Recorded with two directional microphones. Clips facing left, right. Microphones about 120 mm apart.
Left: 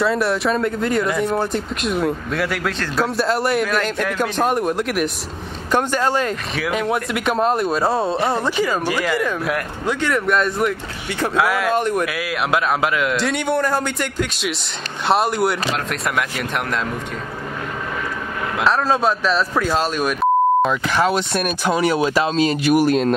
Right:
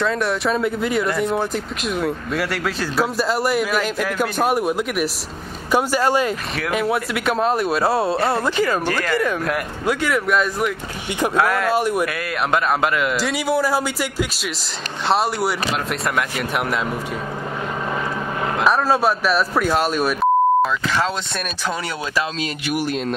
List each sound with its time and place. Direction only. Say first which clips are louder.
0.0 s speech: left 2 dB; centre (ahead or behind)
8.5 s speech: even; 10° left (ahead or behind)
18.6 s speech: even; 10° right (ahead or behind)
20.9 s speech: left 4 dB; 10° left (ahead or behind); by 22.5 s 25° left (ahead or behind)
22.7 s speech: left 6 dB; 45° left (ahead or behind)